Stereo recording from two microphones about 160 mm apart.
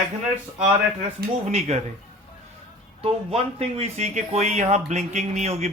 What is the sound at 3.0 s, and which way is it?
Speech, 40° right (ahead or behind).